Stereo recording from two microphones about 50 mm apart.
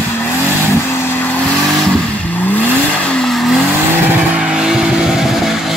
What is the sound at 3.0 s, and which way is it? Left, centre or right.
Vehicle, centre.